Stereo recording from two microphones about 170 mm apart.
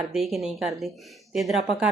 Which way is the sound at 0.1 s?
Centre (ahead or behind).